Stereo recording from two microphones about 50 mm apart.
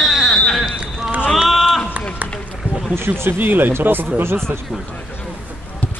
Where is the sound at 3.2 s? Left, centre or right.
Right.